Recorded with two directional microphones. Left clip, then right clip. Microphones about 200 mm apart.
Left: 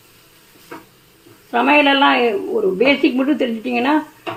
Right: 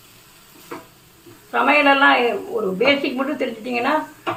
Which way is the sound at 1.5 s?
45° left (ahead or behind).